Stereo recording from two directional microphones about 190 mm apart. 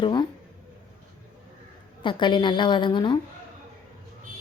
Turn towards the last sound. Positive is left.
turn(degrees=25)  # may be behind; listen again after turning